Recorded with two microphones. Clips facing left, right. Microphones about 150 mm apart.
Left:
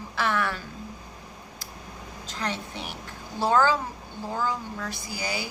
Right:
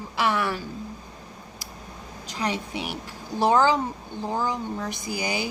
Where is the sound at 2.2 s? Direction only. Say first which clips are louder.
Right 4 dB; 15° right (ahead or behind).